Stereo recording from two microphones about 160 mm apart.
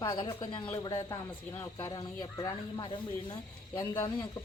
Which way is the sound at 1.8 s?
25° left (ahead or behind).